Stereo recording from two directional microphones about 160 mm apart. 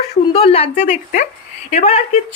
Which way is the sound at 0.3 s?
35° left (ahead or behind).